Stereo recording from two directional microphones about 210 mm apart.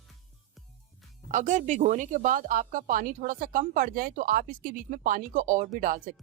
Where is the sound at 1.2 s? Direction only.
35° right (ahead or behind).